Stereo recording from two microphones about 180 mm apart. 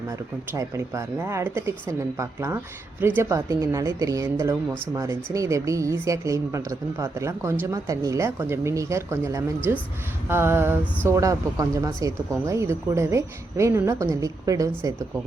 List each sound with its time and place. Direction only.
0.5 s speech: 15° right (ahead or behind)